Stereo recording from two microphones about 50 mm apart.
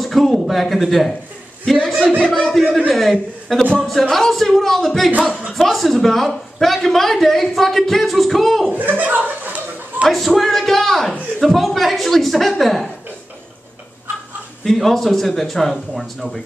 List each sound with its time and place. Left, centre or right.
0.0 s a man's voice: centre
2.1 s speech: left
2.9 s a man's voice: centre
8.7 s speech: right
9.4 s a sound: right
10.0 s a man's voice: centre
14.6 s a man's voice: centre